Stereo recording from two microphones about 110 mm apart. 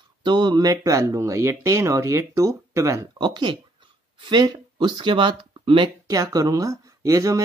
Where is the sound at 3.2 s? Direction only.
40° right (ahead or behind).